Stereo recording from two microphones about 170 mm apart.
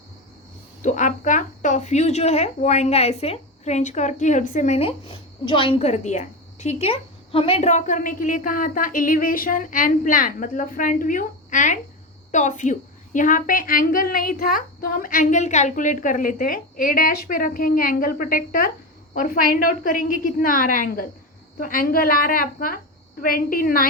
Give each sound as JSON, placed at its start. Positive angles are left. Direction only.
{"t": 0.8, "sound": "a woman's voice", "side_deg": 45}